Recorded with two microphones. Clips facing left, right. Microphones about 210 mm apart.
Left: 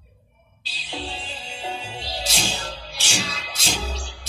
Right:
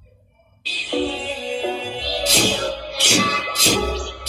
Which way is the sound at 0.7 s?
65° right (ahead or behind).